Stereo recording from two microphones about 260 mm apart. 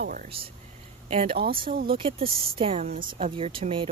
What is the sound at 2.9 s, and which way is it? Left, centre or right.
Speech, right.